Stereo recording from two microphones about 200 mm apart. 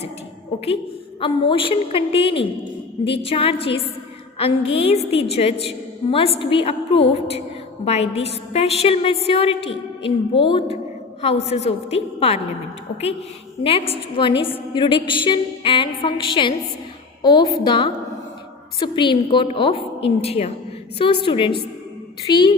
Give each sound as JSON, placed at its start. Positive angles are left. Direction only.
{"t": 1.2, "sound": "a woman's voice", "side_deg": 25}
{"t": 13.6, "sound": "a woman's voice", "side_deg": 30}